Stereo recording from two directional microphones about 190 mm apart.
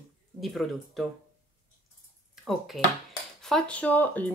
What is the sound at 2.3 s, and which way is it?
Speech, centre (ahead or behind).